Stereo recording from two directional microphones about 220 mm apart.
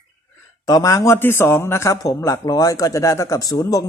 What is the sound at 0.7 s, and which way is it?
A man's voice, 15° left (ahead or behind).